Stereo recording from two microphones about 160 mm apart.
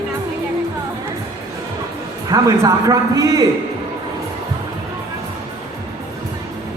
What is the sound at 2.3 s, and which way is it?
A man's voice, 20° right (ahead or behind).